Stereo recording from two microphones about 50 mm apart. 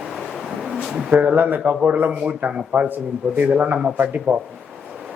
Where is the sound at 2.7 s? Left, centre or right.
Right.